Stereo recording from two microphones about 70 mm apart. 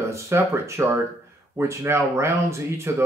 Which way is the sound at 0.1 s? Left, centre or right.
Right.